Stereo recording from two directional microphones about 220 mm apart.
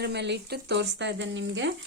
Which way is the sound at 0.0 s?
50° right (ahead or behind).